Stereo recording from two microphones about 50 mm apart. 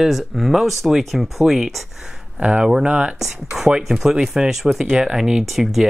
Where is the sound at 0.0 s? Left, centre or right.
Centre.